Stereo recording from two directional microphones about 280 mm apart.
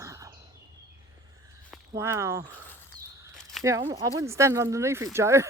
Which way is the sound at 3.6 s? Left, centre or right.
Centre.